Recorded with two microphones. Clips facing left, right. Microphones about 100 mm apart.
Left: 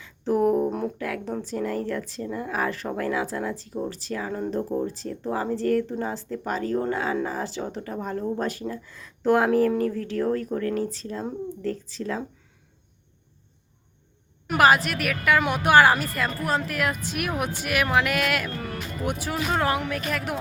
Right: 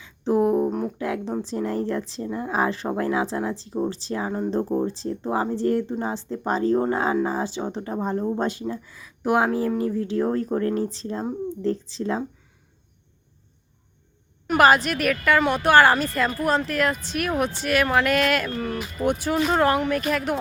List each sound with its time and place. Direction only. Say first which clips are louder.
0.0 s a sound: right 1 dB; 20° right (ahead or behind)
0.7 s music: right 1 dB; centre (ahead or behind)
0.9 s speech: right 3 dB; 25° right (ahead or behind)
7.3 s speech: right 3 dB; 20° right (ahead or behind)
14.4 s a woman's voice: right 2 dB; centre (ahead or behind)